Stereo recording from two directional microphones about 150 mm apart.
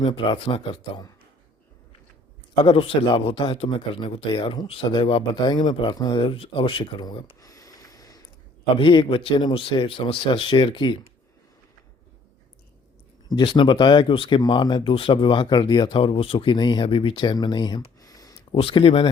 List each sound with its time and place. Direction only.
0.0 s a man's voice: 35° left (ahead or behind)
2.6 s a man's voice: 40° left (ahead or behind)
13.2 s a man's voice: 30° left (ahead or behind)
18.6 s a man's voice: 40° left (ahead or behind)